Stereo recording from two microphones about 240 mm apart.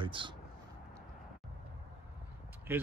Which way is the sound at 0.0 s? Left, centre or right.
Right.